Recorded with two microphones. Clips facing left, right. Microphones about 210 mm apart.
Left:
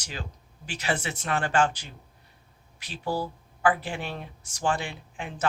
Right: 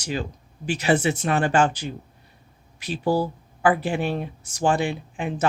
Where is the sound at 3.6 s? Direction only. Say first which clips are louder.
Right 5 dB; 15° right (ahead or behind).